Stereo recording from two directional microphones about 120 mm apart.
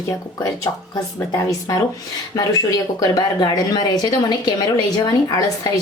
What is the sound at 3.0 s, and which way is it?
A woman's voice, 35° left (ahead or behind).